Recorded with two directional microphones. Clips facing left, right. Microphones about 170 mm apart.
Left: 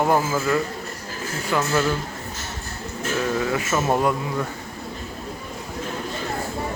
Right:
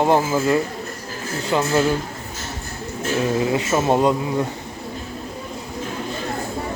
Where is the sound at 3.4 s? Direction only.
20° right (ahead or behind).